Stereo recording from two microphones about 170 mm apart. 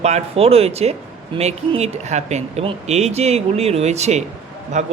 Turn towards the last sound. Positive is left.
turn(degrees=-45)  # may be behind; listen again after turning